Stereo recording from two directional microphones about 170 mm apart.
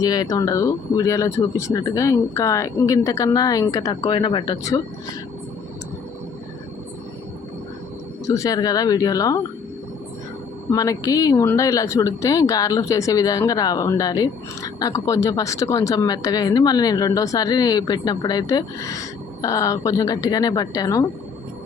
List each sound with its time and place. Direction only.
0.0 s speech: 20° left (ahead or behind)
8.3 s speech: 20° left (ahead or behind)
10.7 s speech: 20° left (ahead or behind)